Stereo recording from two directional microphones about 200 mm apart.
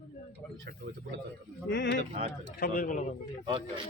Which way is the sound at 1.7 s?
60° left (ahead or behind).